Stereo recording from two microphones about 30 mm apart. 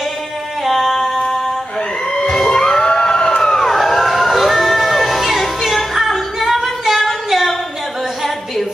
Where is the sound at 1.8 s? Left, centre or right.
Left.